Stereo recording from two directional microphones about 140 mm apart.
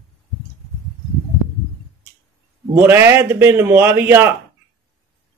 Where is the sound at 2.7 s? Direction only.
15° right (ahead or behind).